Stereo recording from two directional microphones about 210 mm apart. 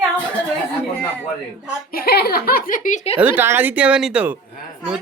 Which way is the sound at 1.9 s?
45° left (ahead or behind).